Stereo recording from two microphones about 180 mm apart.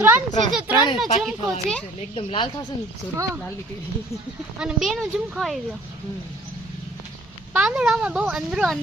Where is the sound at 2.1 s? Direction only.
30° left (ahead or behind).